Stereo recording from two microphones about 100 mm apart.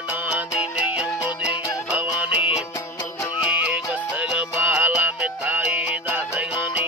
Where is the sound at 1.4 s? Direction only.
10° right (ahead or behind).